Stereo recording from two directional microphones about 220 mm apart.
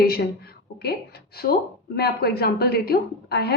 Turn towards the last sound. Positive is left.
turn(degrees=50)  # may be behind; listen again after turning